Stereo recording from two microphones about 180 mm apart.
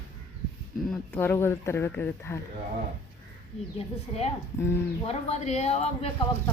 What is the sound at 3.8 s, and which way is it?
Speech, 35° left (ahead or behind).